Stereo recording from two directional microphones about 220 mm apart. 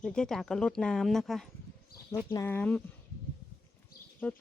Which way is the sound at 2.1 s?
10° left (ahead or behind).